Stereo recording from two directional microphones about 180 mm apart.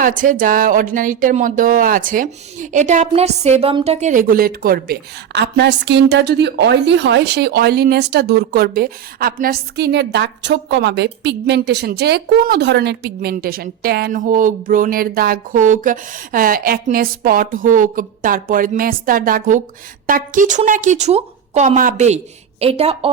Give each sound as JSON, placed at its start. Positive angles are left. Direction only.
{"t": 0.0, "sound": "a woman's voice", "side_deg": -50}